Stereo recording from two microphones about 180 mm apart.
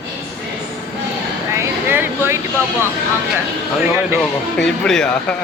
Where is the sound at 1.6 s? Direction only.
10° right (ahead or behind).